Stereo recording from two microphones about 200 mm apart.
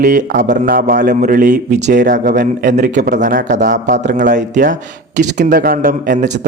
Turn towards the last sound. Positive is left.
turn(degrees=-40)  # may be behind; listen again after turning